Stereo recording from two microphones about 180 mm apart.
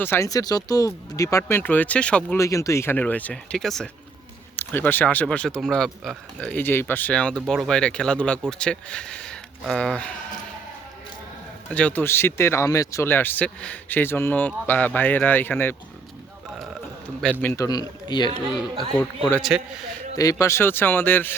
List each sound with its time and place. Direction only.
0.0 s speech: 15° left (ahead or behind)
2.4 s speech: 15° left (ahead or behind)
11.7 s speech: 10° left (ahead or behind)
17.4 s speech: 15° left (ahead or behind)
18.9 s speech: 10° left (ahead or behind)
19.4 s speech: 5° right (ahead or behind)
20.1 s speech: 20° left (ahead or behind)